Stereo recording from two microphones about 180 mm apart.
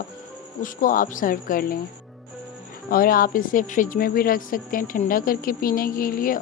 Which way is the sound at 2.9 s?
55° left (ahead or behind).